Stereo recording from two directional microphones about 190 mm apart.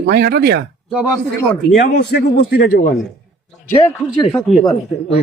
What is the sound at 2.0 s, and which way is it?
Speech, 60° left (ahead or behind).